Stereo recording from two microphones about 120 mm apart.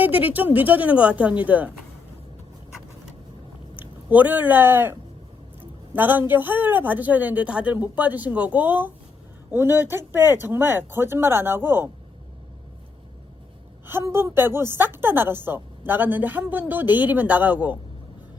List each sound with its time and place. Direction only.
0.0 s speech: 15° right (ahead or behind)
4.1 s speech: 15° right (ahead or behind)
13.8 s speech: 20° right (ahead or behind)